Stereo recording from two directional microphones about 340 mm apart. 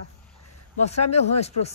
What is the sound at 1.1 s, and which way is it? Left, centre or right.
Speech, centre.